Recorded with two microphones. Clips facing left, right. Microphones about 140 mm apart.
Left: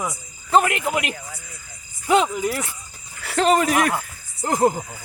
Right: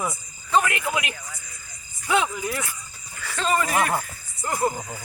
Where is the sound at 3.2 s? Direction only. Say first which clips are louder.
Left 6 dB; 70° left (ahead or behind); by 4.7 s 90° left.